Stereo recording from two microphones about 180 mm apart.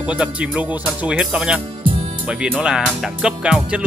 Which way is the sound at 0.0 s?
5° right (ahead or behind).